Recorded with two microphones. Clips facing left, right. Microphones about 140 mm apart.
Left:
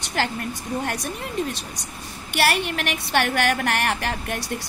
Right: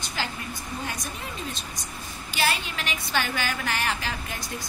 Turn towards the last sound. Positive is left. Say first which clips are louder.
# left 6 dB
turn(degrees=70)  # may be behind; listen again after turning